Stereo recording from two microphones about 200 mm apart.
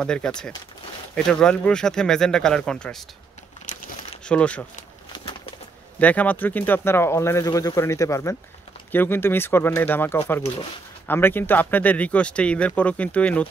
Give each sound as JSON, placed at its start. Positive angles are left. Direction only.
{"t": 0.0, "sound": "speech", "side_deg": 5}
{"t": 3.7, "sound": "crumpling", "side_deg": 40}
{"t": 4.2, "sound": "speech", "side_deg": 5}
{"t": 5.1, "sound": "bird", "side_deg": 25}
{"t": 5.9, "sound": "speech", "side_deg": 10}